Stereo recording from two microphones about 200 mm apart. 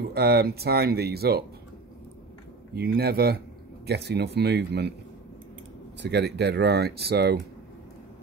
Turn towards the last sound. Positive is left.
turn(degrees=-55)  # may be behind; listen again after turning